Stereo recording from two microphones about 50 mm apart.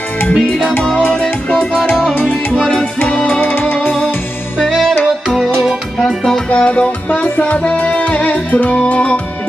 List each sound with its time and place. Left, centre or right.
1.5 s music: left
3.3 s music: left
4.6 s music: centre
6.0 s music: centre
6.5 s music: left